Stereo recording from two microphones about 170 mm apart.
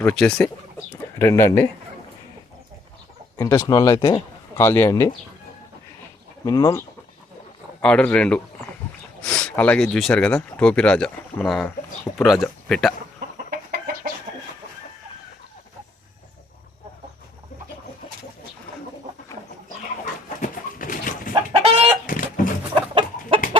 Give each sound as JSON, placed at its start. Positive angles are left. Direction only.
{"t": 0.0, "sound": "speech", "side_deg": 5}
{"t": 1.2, "sound": "speech", "side_deg": 15}
{"t": 3.3, "sound": "speech", "side_deg": 15}
{"t": 6.4, "sound": "speech", "side_deg": 20}
{"t": 7.8, "sound": "speech", "side_deg": 5}
{"t": 13.5, "sound": "chicken", "side_deg": -60}
{"t": 20.4, "sound": "bird", "side_deg": 55}
{"t": 21.5, "sound": "chicken", "side_deg": -35}
{"t": 22.0, "sound": "a sound", "side_deg": 50}
{"t": 22.7, "sound": "chicken", "side_deg": -30}